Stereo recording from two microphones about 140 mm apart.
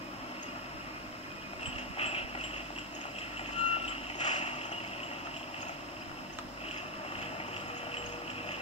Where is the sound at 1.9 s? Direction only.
45° left (ahead or behind).